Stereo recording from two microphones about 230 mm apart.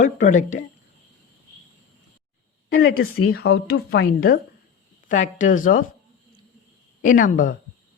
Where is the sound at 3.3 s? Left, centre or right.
Left.